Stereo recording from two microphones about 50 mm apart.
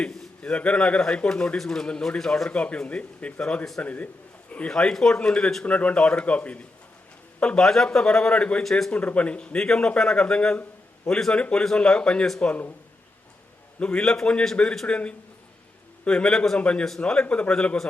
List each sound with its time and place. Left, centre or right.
0.0 s a man's voice: left
2.5 s a man's voice: left
3.8 s a man's voice: left
4.7 s a man's voice: centre
7.6 s a man's voice: centre; by 9.6 s left
9.6 s a man's voice: centre
13.7 s a man's voice: centre